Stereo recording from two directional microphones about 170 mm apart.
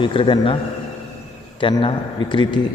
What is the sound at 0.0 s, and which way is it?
Speech, 30° left (ahead or behind).